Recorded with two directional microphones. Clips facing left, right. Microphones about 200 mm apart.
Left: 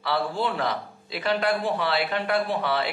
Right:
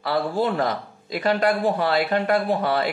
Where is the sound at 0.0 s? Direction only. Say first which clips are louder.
Right 4 dB; 45° right (ahead or behind).